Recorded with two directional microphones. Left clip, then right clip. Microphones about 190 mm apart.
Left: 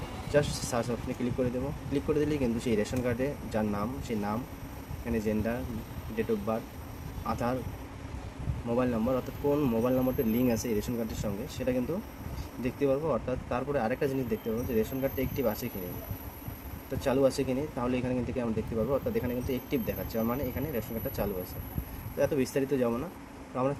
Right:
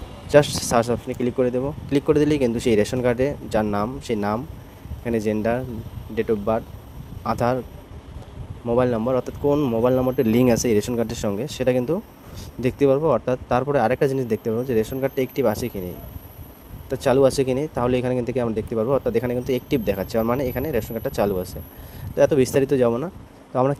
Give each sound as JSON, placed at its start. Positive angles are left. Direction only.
{"t": 0.3, "sound": "speech", "side_deg": -60}
{"t": 1.0, "sound": "speech", "side_deg": -45}
{"t": 7.3, "sound": "speech", "side_deg": -55}
{"t": 8.7, "sound": "speech", "side_deg": -50}
{"t": 10.2, "sound": "speech", "side_deg": -60}
{"t": 16.9, "sound": "speech", "side_deg": -55}